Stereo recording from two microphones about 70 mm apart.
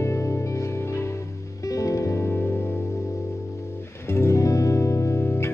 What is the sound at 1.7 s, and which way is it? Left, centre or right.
Music, left.